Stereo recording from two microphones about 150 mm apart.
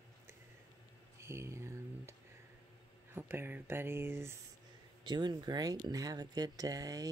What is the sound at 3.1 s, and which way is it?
Speech, 15° right (ahead or behind).